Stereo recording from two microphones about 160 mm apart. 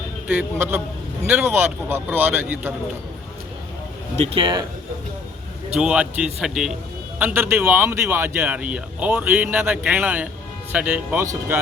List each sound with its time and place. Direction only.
0.3 s a man's voice: 15° right (ahead or behind)
4.1 s speech: 40° right (ahead or behind)
5.8 s a man's voice: 5° right (ahead or behind)